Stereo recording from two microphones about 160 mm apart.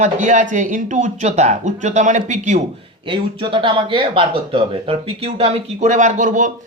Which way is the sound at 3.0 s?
30° right (ahead or behind).